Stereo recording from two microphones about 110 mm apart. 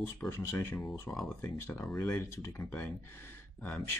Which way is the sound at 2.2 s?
25° left (ahead or behind).